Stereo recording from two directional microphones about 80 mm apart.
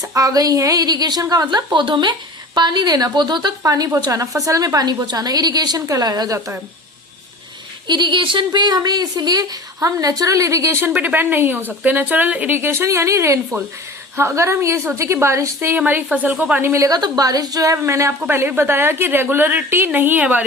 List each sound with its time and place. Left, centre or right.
0.0 s a woman's voice: right
2.6 s speech: right
3.6 s a woman's voice: right
7.9 s speech: right
11.0 s a woman's voice: right
16.1 s speech: centre
16.6 s a woman's voice: right
16.9 s a woman's voice: right
18.2 s speech: right